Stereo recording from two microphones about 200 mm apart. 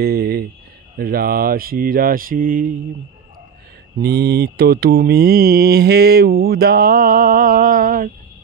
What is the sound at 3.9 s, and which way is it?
Mantra, 50° right (ahead or behind).